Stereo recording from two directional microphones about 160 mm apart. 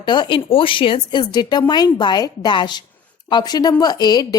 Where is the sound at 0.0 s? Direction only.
30° left (ahead or behind).